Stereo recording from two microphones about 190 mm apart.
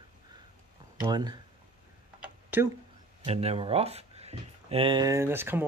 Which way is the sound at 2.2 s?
10° right (ahead or behind).